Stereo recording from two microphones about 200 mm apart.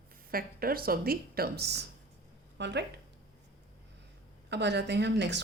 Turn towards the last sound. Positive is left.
turn(degrees=-60)  # may be behind; listen again after turning